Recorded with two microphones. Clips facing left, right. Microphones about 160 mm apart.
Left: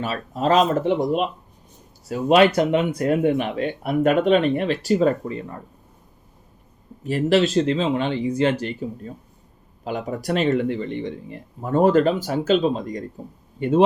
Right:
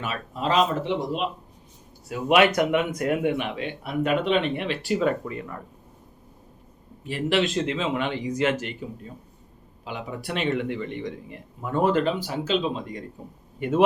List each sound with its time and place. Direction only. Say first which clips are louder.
0.0 s speech: left 5 dB; 40° left (ahead or behind)
2.0 s speech: left 4 dB; 35° left (ahead or behind)
7.0 s speech: left 5 dB; 40° left (ahead or behind)
9.8 s speech: left 7 dB; 45° left (ahead or behind)
13.6 s speech: left 4 dB; 30° left (ahead or behind)